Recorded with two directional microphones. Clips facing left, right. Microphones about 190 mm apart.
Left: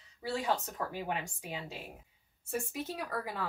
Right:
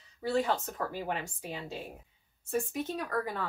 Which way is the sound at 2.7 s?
5° left (ahead or behind).